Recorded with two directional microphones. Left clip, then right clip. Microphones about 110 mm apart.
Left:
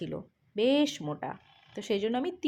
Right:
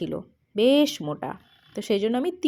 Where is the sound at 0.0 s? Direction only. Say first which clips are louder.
Right 7 dB; 35° right (ahead or behind).